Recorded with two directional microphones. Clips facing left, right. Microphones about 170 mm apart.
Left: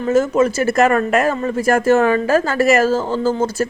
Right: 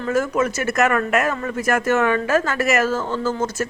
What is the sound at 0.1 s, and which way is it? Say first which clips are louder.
Speech: left 6 dB; 25° left (ahead or behind).